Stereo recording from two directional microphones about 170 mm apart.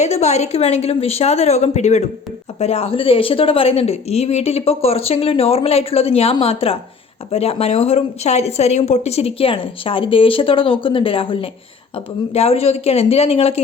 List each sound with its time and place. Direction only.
0.0 s a woman's voice: 40° left (ahead or behind)